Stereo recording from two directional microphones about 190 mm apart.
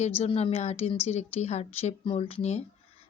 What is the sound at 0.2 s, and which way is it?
A woman's voice, 30° left (ahead or behind).